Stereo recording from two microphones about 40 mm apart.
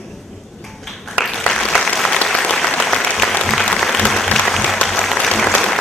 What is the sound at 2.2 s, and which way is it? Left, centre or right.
Applause, centre.